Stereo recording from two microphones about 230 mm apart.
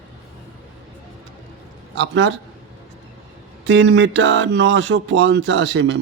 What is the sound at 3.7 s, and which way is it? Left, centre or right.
Speech, right.